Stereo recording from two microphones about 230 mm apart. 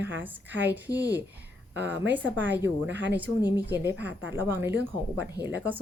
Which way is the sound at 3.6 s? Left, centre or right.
Centre.